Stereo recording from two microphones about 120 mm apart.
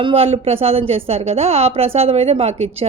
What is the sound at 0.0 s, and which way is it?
Speech, 50° right (ahead or behind).